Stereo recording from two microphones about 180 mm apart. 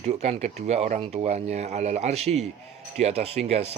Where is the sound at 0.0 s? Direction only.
35° right (ahead or behind).